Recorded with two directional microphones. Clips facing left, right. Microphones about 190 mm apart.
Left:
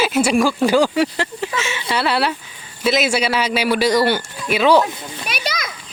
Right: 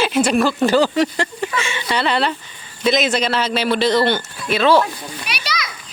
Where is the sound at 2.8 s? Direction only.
5° left (ahead or behind).